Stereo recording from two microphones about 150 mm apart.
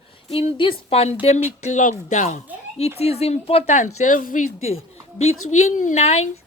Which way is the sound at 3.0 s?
45° left (ahead or behind).